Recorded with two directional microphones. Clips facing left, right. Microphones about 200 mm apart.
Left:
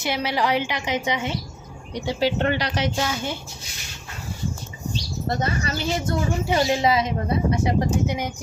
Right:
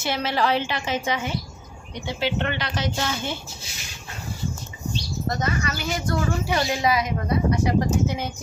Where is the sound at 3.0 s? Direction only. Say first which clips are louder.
Left 2 dB; 5° left (ahead or behind).